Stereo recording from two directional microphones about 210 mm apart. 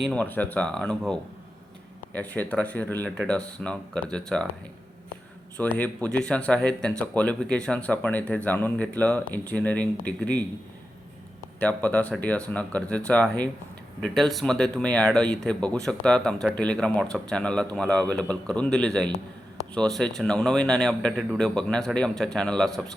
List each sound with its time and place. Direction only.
0.0 s speech: 5° left (ahead or behind)
5.5 s speech: 5° left (ahead or behind)
11.6 s speech: 5° left (ahead or behind)